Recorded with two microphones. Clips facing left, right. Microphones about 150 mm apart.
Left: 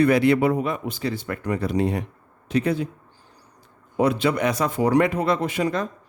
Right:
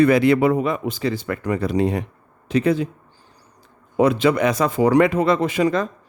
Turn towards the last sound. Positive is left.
turn(degrees=-90)